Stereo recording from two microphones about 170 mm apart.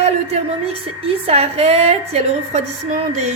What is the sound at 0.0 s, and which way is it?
A woman's voice, 40° right (ahead or behind).